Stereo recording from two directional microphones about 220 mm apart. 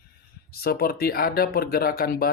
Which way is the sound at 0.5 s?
45° left (ahead or behind).